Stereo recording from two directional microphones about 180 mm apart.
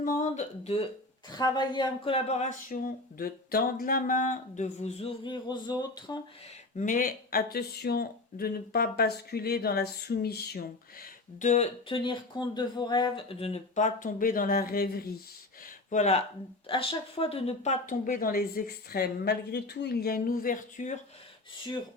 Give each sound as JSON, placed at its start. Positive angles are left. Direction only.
{"t": 0.0, "sound": "speech", "side_deg": 45}
{"t": 1.3, "sound": "speech", "side_deg": 25}
{"t": 5.2, "sound": "speech", "side_deg": 25}
{"t": 6.7, "sound": "speech", "side_deg": 45}
{"t": 15.6, "sound": "speech", "side_deg": 40}